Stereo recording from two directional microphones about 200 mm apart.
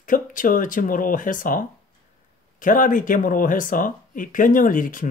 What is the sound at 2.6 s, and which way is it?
Speech, 40° left (ahead or behind).